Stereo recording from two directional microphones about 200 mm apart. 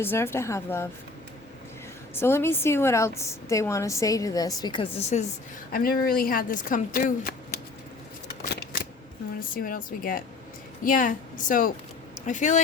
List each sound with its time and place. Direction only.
0.0 s a woman's voice: 10° left (ahead or behind)
2.1 s a woman's voice: 10° left (ahead or behind); by 5.2 s 30° left (ahead or behind)
5.7 s speech: 45° left (ahead or behind)
9.6 s speech: 45° left (ahead or behind)